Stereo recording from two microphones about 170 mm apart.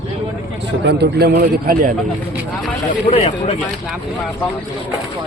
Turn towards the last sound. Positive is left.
turn(degrees=40)  # may be behind; listen again after turning